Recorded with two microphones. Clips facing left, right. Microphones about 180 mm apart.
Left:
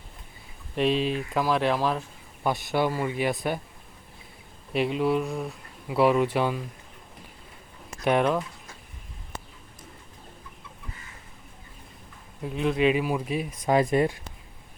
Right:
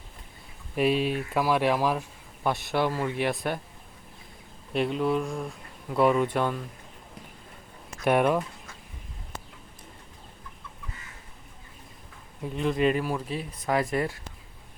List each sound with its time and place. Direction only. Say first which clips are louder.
0.8 s speech: even; 5° right (ahead or behind)
4.7 s speech: left 1 dB; 5° left (ahead or behind)
8.0 s speech: even; 5° right (ahead or behind)
12.4 s speech: left 1 dB; centre (ahead or behind); by 14.2 s 20° left (ahead or behind)